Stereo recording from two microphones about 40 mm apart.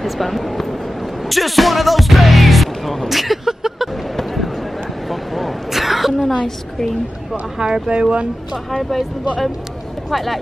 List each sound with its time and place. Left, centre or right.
0.0 s speech: centre
4.2 s a sound: centre
7.5 s speech: centre
7.9 s speech: right
8.6 s speech: centre
10.1 s speech: centre